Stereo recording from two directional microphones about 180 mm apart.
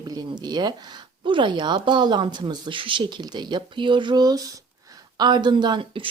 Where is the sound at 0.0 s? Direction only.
20° right (ahead or behind).